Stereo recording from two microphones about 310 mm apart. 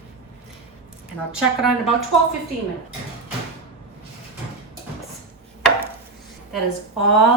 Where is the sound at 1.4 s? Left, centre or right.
Centre.